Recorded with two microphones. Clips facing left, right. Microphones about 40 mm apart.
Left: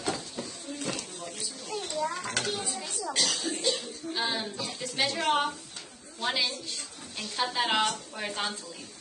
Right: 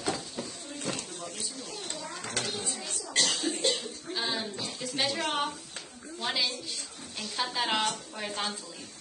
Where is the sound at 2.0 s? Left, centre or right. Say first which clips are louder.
Left 3 dB; left.